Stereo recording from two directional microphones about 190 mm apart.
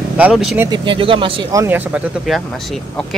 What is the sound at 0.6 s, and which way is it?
Speech, 25° right (ahead or behind).